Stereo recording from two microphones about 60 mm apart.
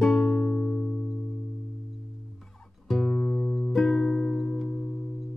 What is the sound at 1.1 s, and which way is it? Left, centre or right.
Music, centre.